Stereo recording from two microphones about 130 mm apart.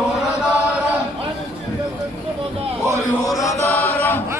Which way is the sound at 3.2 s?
25° left (ahead or behind).